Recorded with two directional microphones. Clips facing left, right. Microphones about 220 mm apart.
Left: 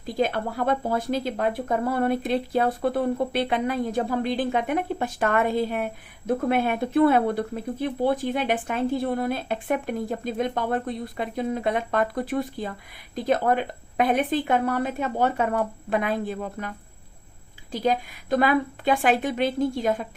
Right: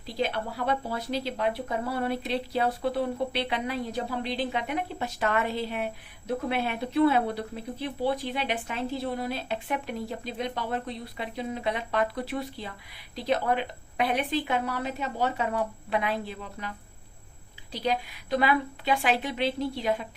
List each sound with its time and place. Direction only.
0.0 s speech: 50° left (ahead or behind)